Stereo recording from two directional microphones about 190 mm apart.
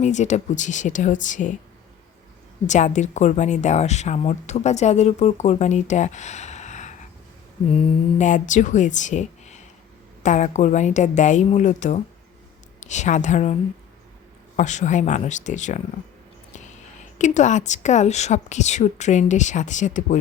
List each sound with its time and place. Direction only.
0.0 s speech: 40° left (ahead or behind)
2.6 s speech: 40° left (ahead or behind)
17.2 s speech: 40° left (ahead or behind)